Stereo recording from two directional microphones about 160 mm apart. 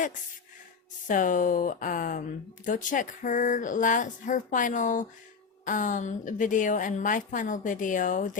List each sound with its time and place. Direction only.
1.0 s a woman's voice: 55° left (ahead or behind)